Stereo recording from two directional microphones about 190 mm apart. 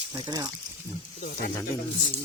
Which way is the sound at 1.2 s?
45° left (ahead or behind).